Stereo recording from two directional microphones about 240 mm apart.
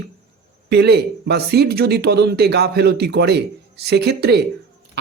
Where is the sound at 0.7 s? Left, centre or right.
Right.